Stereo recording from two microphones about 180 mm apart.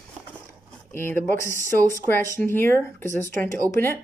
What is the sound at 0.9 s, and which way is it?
Speech, 10° left (ahead or behind).